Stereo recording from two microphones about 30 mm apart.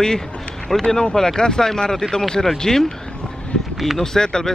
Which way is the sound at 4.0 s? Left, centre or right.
Centre.